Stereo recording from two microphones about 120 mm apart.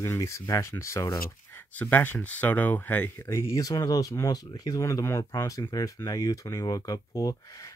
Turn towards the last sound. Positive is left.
turn(degrees=25)  # may be behind; listen again after turning